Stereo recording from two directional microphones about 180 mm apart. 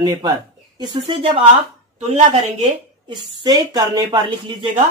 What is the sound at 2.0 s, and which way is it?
Speech, 35° right (ahead or behind).